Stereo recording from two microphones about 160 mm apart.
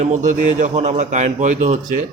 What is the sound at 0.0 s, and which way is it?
Speech, 50° right (ahead or behind).